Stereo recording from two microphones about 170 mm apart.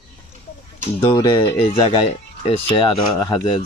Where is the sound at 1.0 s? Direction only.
25° left (ahead or behind).